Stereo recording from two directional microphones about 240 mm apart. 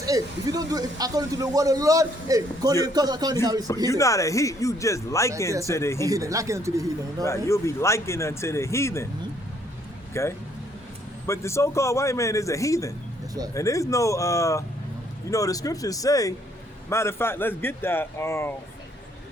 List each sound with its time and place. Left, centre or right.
0.0 s a man's voice: centre
3.8 s speech: centre
6.1 s a man's voice: centre
7.3 s speech: centre
10.2 s speech: centre